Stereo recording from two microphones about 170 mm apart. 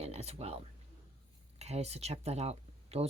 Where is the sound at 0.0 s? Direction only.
40° right (ahead or behind).